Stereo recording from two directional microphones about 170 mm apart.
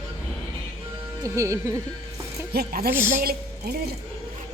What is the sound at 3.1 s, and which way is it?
Speech, 65° right (ahead or behind).